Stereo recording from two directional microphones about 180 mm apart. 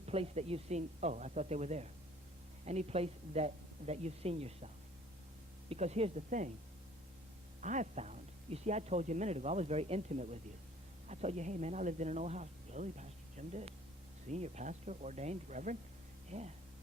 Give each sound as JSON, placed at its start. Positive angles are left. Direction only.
{"t": 0.0, "sound": "speech", "side_deg": -35}
{"t": 7.6, "sound": "speech", "side_deg": -40}